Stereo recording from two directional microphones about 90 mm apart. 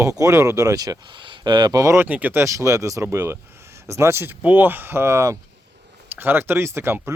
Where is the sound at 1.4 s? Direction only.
55° right (ahead or behind).